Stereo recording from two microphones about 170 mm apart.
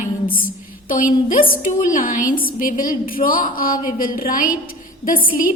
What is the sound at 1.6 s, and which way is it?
A woman's voice, 50° left (ahead or behind).